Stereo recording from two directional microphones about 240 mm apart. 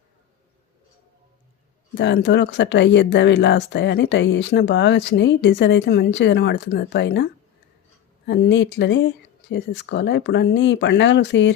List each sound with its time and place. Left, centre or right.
2.0 s speech: left
8.3 s speech: left